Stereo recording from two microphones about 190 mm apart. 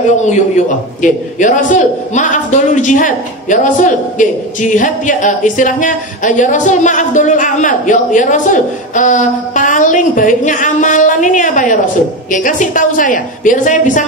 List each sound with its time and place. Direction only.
0.2 s a man's voice: 40° left (ahead or behind)